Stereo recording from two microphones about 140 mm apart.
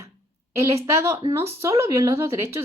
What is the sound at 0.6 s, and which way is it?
A woman's voice, 20° right (ahead or behind).